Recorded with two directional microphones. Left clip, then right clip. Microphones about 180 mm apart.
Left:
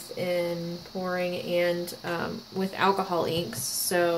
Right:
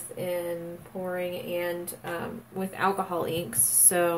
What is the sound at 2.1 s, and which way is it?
Speech, 20° left (ahead or behind).